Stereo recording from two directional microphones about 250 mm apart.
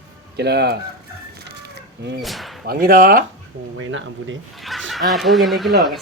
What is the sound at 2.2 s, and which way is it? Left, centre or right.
Speech, centre.